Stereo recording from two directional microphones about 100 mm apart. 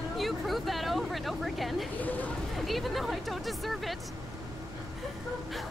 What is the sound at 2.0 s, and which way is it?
Speech, 15° left (ahead or behind).